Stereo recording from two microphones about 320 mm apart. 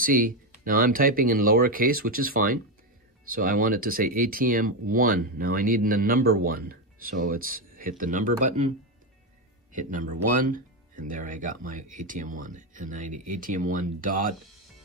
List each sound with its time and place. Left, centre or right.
0.0 s speech: right